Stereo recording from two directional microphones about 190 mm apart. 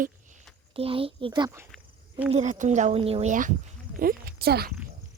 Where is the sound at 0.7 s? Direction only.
30° right (ahead or behind).